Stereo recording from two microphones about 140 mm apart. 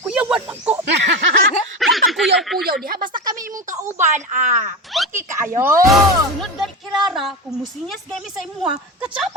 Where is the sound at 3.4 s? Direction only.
70° right (ahead or behind).